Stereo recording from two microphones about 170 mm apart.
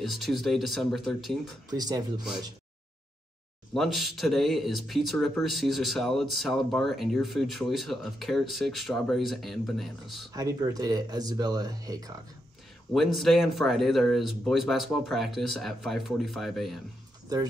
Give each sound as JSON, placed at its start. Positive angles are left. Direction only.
{"t": 0.0, "sound": "speech", "side_deg": 0}
{"t": 1.7, "sound": "speech", "side_deg": -20}
{"t": 3.7, "sound": "speech", "side_deg": 0}
{"t": 10.3, "sound": "speech", "side_deg": -20}
{"t": 12.9, "sound": "speech", "side_deg": 0}